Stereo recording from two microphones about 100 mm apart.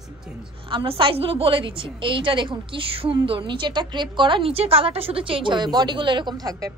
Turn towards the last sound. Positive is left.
turn(degrees=-40)  # may be behind; listen again after turning